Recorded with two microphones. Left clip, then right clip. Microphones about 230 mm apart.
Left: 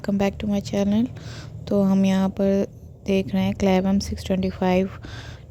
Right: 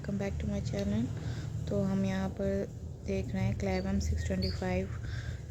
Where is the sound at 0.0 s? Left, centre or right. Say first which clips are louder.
Left 13 dB; left.